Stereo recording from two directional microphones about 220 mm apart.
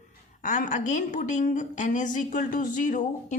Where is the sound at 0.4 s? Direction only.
35° left (ahead or behind).